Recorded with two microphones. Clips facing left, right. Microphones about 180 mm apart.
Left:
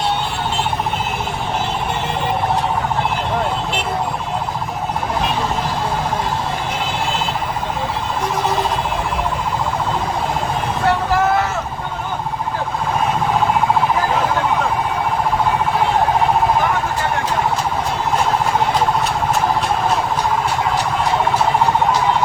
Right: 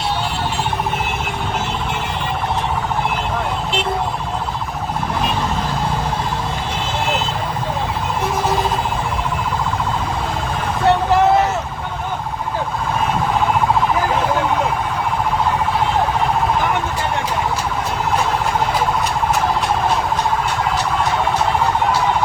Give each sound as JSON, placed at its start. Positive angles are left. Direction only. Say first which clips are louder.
{"t": 10.8, "sound": "vehicle", "louder": "right 3 dB", "side_deg": -20}